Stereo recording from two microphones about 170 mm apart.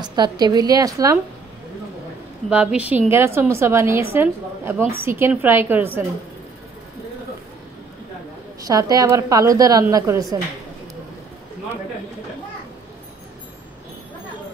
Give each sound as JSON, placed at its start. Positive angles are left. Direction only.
{"t": 0.0, "sound": "a woman's voice", "side_deg": -25}
{"t": 2.5, "sound": "a woman's voice", "side_deg": -5}
{"t": 8.5, "sound": "a woman's voice", "side_deg": -20}